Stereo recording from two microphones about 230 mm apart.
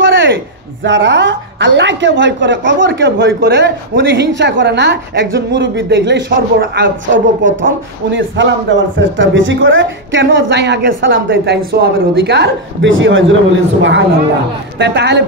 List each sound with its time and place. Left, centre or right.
0.0 s a sound: right
0.8 s a man's voice: right
8.1 s a man's voice: right